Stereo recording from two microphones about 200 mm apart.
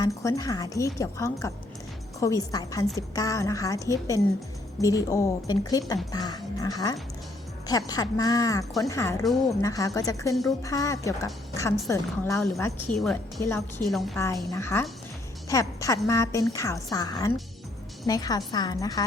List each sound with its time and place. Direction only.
0.0 s a woman's voice: 15° left (ahead or behind)
13.9 s a woman's voice: centre (ahead or behind)
14.5 s a woman's voice: 10° left (ahead or behind)